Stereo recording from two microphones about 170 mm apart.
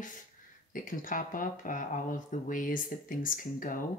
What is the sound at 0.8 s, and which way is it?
Speech, 50° left (ahead or behind).